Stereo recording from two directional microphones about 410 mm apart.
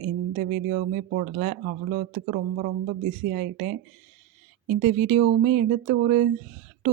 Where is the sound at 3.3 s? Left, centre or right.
Right.